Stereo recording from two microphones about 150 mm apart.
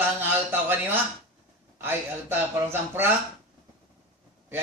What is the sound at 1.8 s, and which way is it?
A man's voice, 15° right (ahead or behind).